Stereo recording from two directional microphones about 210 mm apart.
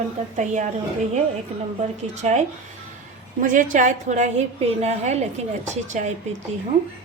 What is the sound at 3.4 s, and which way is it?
A woman's voice, 40° right (ahead or behind).